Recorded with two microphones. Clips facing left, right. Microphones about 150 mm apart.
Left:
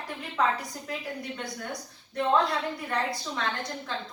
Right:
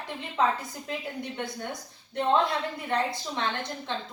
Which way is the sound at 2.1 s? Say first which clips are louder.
Even; 25° right (ahead or behind).